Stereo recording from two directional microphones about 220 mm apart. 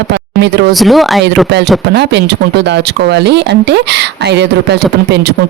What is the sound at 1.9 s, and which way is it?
Speech, 50° right (ahead or behind).